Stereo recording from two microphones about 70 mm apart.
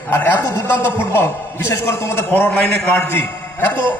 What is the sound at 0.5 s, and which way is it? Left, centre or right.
A man's voice, left.